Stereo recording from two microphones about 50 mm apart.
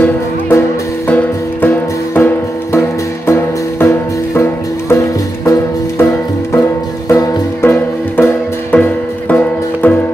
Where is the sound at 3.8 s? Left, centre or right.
Left.